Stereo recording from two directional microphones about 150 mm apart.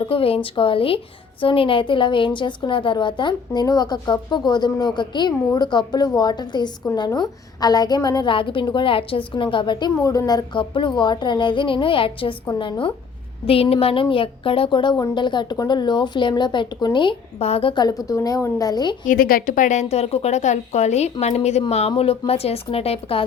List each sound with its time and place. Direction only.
0.1 s a woman's voice: 40° left (ahead or behind)
19.0 s a woman's voice: 70° left (ahead or behind); by 23.2 s 40° left (ahead or behind)